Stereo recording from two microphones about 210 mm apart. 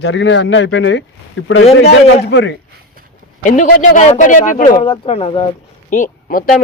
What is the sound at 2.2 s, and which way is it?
Speech, 55° left (ahead or behind).